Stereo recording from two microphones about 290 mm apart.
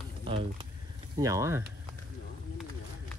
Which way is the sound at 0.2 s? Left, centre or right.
Centre.